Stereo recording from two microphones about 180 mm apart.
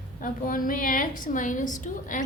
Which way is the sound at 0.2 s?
50° left (ahead or behind).